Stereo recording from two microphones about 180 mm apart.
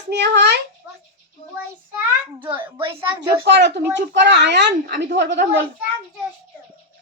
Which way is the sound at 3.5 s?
75° right (ahead or behind).